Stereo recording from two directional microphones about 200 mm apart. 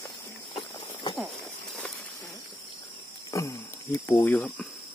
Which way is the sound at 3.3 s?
15° left (ahead or behind).